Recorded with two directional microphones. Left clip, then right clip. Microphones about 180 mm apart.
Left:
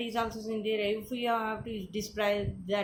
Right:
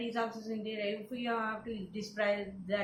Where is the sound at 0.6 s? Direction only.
60° left (ahead or behind).